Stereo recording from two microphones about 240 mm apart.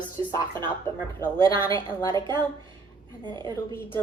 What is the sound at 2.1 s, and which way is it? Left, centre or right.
Speech, centre.